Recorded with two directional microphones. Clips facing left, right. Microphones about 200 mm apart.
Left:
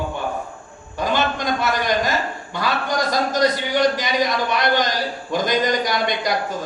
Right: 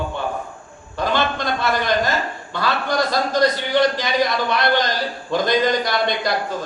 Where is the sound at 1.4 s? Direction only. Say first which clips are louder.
Even; 15° left (ahead or behind).